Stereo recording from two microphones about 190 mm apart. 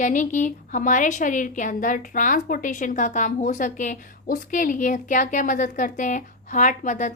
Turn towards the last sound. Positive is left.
turn(degrees=40)  # may be behind; listen again after turning